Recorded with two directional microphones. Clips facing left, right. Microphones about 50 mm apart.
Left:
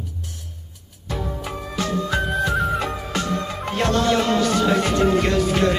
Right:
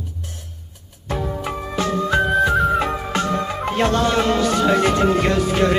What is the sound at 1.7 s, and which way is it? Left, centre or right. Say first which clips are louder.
Music: right 4 dB; right.